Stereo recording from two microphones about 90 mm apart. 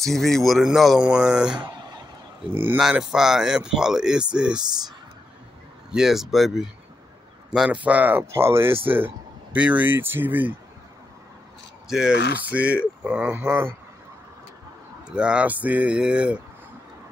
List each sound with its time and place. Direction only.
0.0 s speech: 5° left (ahead or behind)
2.5 s speech: 20° right (ahead or behind)
2.8 s speech: 10° right (ahead or behind)
5.9 s speech: 5° right (ahead or behind); by 10.5 s 20° right (ahead or behind)
11.9 s speech: 10° right (ahead or behind)
15.0 s speech: 10° right (ahead or behind)